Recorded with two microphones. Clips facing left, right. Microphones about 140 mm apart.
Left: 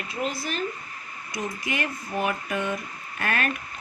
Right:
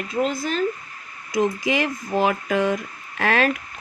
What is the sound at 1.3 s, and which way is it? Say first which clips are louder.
Speech: right 10 dB; 90° right.